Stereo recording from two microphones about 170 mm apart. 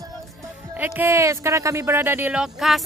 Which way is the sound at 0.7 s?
10° right (ahead or behind).